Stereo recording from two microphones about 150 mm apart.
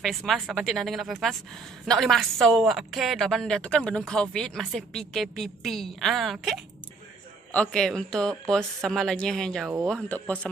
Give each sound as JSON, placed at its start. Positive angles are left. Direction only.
{"t": 0.0, "sound": "a woman's voice", "side_deg": 0}